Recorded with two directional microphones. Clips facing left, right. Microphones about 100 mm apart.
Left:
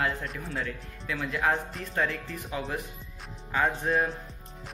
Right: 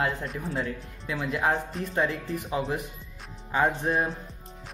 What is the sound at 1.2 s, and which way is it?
Speech, 15° right (ahead or behind).